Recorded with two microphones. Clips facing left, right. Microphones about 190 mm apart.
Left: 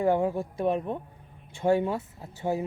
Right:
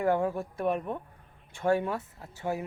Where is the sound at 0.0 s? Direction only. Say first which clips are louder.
Left 2 dB; 20° left (ahead or behind).